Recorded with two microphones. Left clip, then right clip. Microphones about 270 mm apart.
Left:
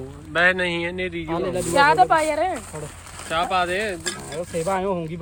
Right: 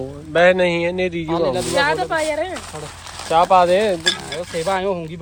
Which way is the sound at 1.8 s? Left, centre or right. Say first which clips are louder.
Left 5 dB; left.